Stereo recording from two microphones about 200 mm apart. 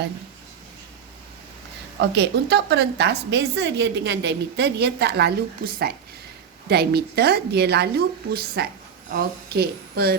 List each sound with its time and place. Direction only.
2.0 s a woman's voice: 60° right (ahead or behind)